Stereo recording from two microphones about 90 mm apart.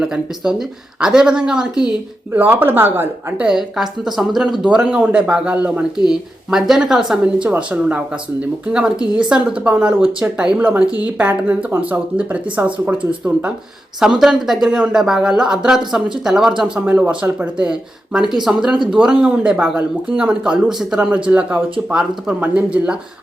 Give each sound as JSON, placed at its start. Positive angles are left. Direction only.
{"t": 0.0, "sound": "speech", "side_deg": -5}
{"t": 2.3, "sound": "a woman's voice", "side_deg": -20}
{"t": 3.3, "sound": "speech", "side_deg": -5}
{"t": 6.1, "sound": "speech", "side_deg": -5}